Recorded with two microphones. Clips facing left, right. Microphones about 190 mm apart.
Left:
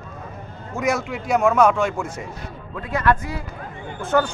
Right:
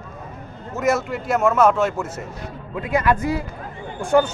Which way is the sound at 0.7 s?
Centre (ahead or behind).